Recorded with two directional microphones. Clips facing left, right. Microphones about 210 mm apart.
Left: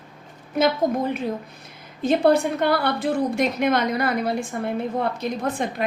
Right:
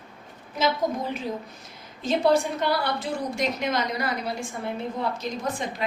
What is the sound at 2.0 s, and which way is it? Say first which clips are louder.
A woman's voice: left 4 dB; 60° left (ahead or behind).